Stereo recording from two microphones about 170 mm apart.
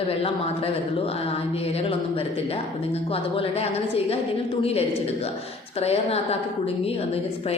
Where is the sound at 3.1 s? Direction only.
35° left (ahead or behind).